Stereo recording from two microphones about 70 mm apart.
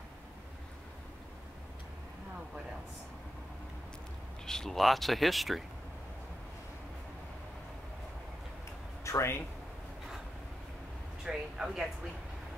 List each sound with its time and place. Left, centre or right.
4.5 s speech: centre
9.0 s speech: left
11.2 s speech: centre